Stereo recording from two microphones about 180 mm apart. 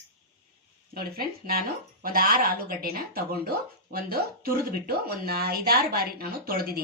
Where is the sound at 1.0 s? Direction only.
55° right (ahead or behind).